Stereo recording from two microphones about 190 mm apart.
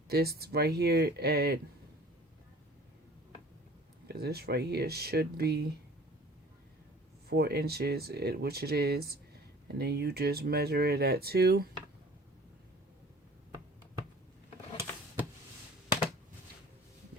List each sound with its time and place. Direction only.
0.1 s speech: 55° right (ahead or behind)
4.1 s speech: 55° right (ahead or behind)
7.3 s speech: 55° right (ahead or behind)